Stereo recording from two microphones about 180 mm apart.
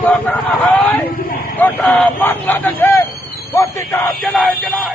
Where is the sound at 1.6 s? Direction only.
10° left (ahead or behind).